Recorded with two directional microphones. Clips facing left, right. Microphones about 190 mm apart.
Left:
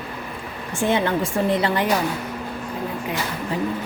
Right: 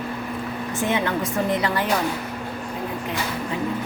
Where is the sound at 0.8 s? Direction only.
30° left (ahead or behind).